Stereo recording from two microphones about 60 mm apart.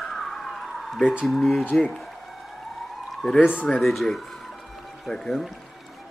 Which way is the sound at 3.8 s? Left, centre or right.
Centre.